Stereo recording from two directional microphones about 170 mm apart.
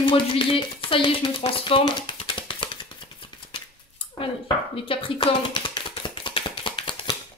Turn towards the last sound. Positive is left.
turn(degrees=30)  # may be behind; listen again after turning